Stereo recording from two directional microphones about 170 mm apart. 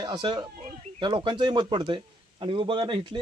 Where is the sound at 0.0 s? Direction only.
25° right (ahead or behind).